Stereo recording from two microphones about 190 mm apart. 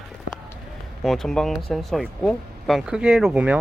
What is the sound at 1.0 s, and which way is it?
Speech, centre (ahead or behind).